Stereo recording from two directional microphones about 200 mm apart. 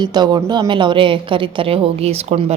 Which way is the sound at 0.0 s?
20° right (ahead or behind).